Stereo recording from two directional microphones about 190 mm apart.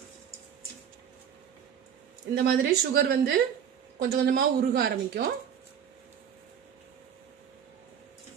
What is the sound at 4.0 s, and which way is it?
A woman's voice, 50° right (ahead or behind).